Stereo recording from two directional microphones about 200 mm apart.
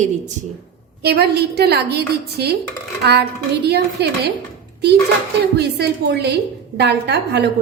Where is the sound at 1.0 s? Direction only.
55° right (ahead or behind).